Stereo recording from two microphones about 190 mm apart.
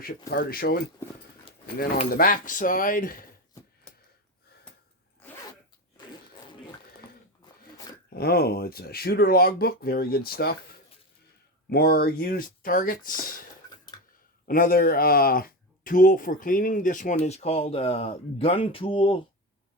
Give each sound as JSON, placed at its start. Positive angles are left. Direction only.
{"t": 0.0, "sound": "speech", "side_deg": 50}
{"t": 2.0, "sound": "speech", "side_deg": 50}
{"t": 5.2, "sound": "zipper", "side_deg": 15}
{"t": 7.4, "sound": "a sound", "side_deg": 20}
{"t": 8.1, "sound": "speech", "side_deg": 55}